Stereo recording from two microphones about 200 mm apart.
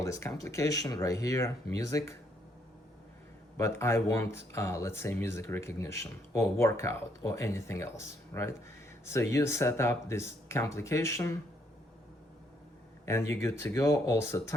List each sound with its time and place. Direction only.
0.0 s speech: 15° left (ahead or behind)
3.6 s speech: 15° left (ahead or behind)
13.1 s speech: 15° left (ahead or behind)